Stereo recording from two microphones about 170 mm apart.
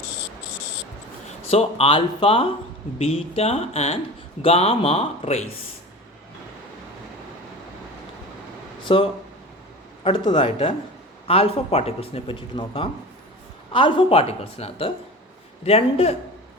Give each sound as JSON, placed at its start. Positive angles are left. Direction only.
{"t": 1.5, "sound": "speech", "side_deg": 35}
{"t": 8.9, "sound": "speech", "side_deg": 30}